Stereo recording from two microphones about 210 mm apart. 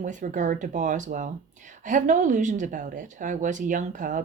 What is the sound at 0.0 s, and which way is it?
Speech, 35° right (ahead or behind).